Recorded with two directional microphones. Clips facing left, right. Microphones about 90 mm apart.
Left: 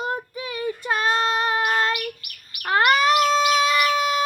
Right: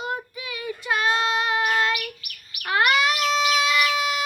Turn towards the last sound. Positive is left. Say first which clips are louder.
# left 3 dB
turn(degrees=40)  # may be behind; listen again after turning